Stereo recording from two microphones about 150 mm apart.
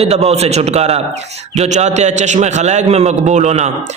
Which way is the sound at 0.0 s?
45° right (ahead or behind).